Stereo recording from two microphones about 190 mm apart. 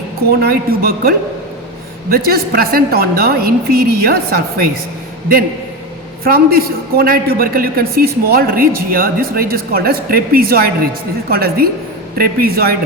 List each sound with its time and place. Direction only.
0.3 s a man's voice: 55° right (ahead or behind)
6.2 s a man's voice: 50° right (ahead or behind)